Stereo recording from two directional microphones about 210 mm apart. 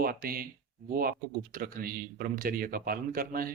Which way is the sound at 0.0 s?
45° right (ahead or behind).